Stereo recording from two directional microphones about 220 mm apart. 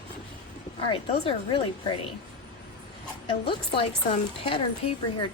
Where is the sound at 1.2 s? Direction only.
20° left (ahead or behind).